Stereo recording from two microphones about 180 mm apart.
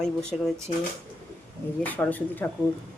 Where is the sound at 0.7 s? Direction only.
40° left (ahead or behind).